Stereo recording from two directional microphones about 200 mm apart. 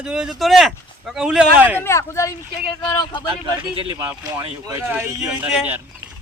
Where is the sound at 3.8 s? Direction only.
20° right (ahead or behind).